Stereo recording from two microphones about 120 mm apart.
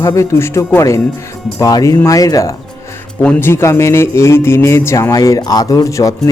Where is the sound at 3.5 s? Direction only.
20° left (ahead or behind).